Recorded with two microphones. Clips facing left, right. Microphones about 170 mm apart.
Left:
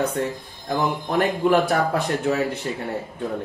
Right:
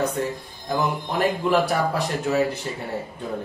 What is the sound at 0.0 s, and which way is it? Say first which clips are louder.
Speech: left 1 dB; centre (ahead or behind).